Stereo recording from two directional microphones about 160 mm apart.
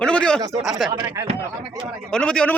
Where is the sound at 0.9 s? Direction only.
20° right (ahead or behind).